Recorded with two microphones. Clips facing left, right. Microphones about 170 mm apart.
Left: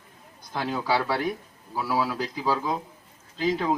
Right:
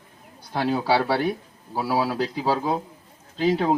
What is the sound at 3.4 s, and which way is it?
Speech, 30° right (ahead or behind).